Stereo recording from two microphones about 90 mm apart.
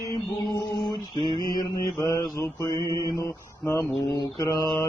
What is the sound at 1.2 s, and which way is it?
Mantra, 55° right (ahead or behind).